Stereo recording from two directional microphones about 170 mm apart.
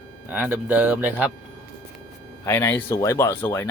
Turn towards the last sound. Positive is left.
turn(degrees=20)  # may be behind; listen again after turning